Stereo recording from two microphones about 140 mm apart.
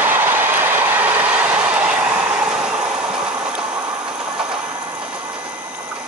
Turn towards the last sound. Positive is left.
turn(degrees=-5)  # may be behind; listen again after turning